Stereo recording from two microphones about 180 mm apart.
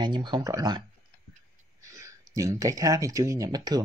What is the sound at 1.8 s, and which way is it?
Speech, 15° right (ahead or behind).